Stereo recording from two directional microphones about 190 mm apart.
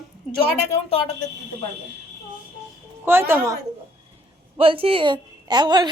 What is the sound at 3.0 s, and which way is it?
Speech, 10° right (ahead or behind).